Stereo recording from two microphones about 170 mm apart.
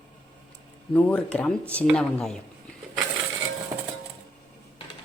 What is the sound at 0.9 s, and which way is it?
A woman's voice, 10° left (ahead or behind).